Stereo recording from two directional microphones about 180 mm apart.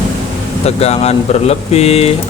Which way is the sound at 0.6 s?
35° left (ahead or behind).